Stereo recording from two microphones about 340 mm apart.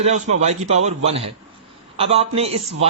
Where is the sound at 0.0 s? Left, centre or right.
Centre.